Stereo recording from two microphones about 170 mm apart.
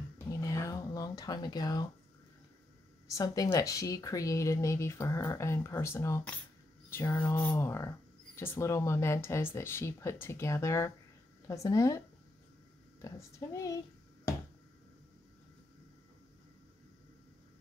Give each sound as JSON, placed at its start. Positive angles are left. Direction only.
{"t": 0.3, "sound": "a sound", "side_deg": 20}
{"t": 3.1, "sound": "speech", "side_deg": 20}
{"t": 13.0, "sound": "speech", "side_deg": 20}